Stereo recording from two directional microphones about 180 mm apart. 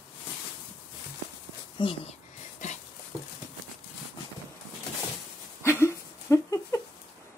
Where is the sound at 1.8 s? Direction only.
30° left (ahead or behind).